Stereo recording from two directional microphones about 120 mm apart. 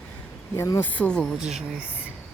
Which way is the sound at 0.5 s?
25° left (ahead or behind).